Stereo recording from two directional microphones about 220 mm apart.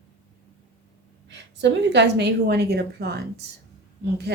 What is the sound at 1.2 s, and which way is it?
Speech, 50° right (ahead or behind).